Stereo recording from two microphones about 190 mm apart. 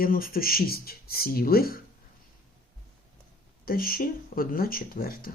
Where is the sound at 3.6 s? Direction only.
50° left (ahead or behind).